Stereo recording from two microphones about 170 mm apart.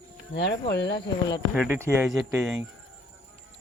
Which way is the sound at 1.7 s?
15° right (ahead or behind).